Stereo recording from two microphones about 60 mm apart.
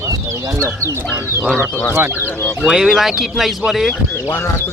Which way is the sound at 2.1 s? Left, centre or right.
Left.